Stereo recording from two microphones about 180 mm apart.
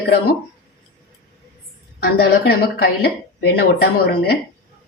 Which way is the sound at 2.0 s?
60° left (ahead or behind).